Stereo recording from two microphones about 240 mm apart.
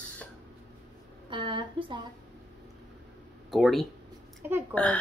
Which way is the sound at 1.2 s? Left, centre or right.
Right.